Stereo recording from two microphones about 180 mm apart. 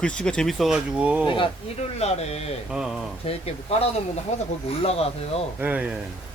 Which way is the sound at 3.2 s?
35° left (ahead or behind).